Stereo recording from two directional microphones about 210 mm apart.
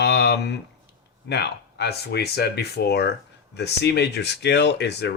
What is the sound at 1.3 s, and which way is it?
Speech, 50° left (ahead or behind).